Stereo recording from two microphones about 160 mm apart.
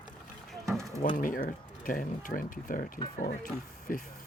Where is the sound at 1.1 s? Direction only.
60° left (ahead or behind).